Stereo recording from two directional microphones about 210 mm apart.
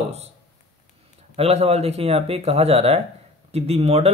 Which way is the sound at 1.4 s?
30° right (ahead or behind).